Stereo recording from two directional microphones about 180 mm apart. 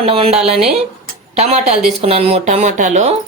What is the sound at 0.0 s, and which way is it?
A woman's voice, 35° right (ahead or behind).